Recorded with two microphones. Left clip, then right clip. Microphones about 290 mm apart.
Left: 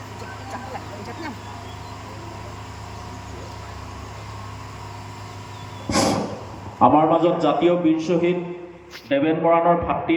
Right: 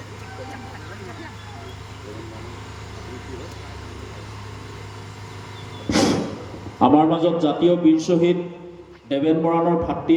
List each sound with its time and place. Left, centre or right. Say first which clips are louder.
5.9 s vehicle: right 1 dB; centre
6.7 s a man's voice: left 1 dB; centre